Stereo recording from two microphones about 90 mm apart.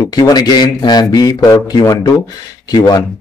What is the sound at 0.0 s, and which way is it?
Speech, 50° left (ahead or behind).